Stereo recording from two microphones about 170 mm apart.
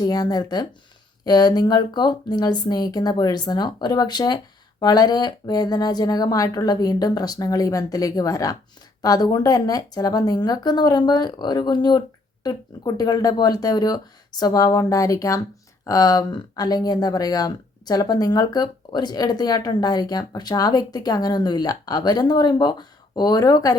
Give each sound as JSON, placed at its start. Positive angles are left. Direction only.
{"t": 0.0, "sound": "speech", "side_deg": 25}